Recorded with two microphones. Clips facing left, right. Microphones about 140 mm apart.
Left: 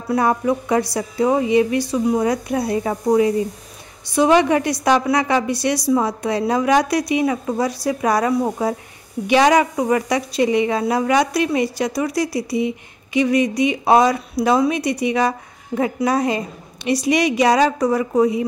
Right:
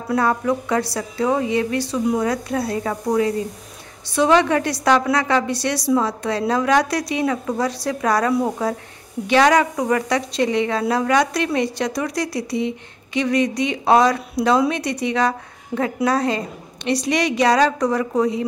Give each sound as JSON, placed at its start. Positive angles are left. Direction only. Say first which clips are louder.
{"t": 0.1, "sound": "a woman's voice", "louder": "left 1 dB", "side_deg": 15}